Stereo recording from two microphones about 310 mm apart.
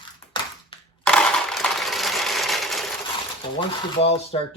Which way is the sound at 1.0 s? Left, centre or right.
Centre.